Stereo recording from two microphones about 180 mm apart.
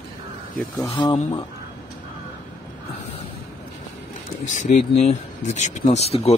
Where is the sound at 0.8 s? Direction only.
25° left (ahead or behind).